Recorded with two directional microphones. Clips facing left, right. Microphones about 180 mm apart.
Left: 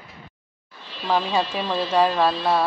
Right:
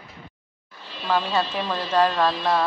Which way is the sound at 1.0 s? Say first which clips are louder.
Left 1 dB; 10° left (ahead or behind).